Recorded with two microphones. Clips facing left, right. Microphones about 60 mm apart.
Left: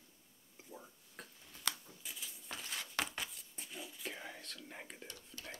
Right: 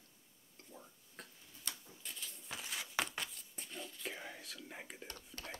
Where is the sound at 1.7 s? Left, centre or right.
Left.